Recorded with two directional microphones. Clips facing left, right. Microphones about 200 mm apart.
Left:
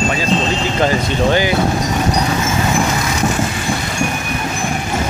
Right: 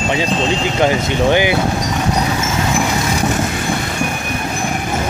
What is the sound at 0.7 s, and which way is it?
Speech, 15° right (ahead or behind).